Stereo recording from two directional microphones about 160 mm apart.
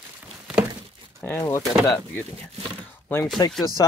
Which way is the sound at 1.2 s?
15° left (ahead or behind).